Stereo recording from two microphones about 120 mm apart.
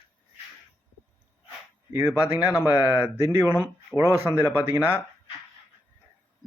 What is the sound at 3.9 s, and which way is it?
Speech, 5° left (ahead or behind).